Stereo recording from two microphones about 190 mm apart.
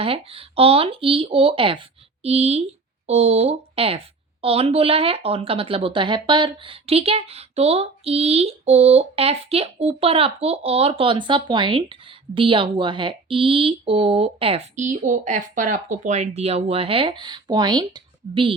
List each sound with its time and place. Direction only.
0.0 s a woman's voice: 30° right (ahead or behind)